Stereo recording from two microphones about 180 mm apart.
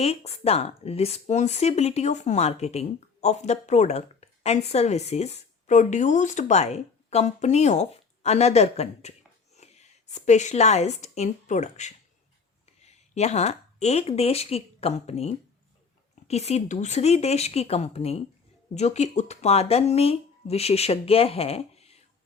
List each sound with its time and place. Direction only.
0.0 s speech: 35° left (ahead or behind)